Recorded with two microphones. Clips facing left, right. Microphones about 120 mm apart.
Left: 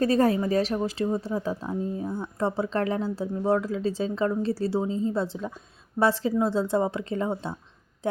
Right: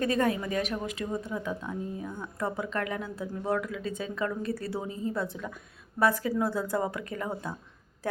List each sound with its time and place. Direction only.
0.0 s a woman's voice: 35° left (ahead or behind)